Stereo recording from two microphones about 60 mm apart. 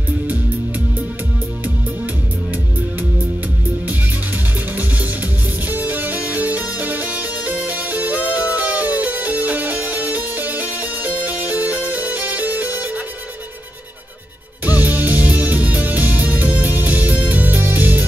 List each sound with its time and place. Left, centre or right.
5.7 s music: right
14.6 s music: right